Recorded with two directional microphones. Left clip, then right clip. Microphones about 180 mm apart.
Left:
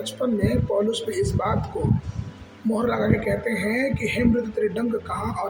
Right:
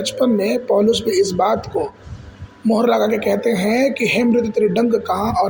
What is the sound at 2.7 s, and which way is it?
A man's voice, 35° right (ahead or behind).